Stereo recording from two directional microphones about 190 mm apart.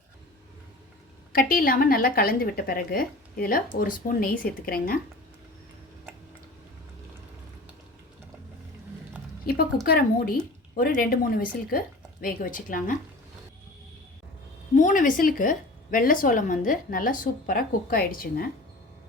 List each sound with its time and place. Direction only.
1.3 s a woman's voice: 50° left (ahead or behind)
9.5 s a woman's voice: 50° left (ahead or behind)
14.8 s a woman's voice: 45° left (ahead or behind)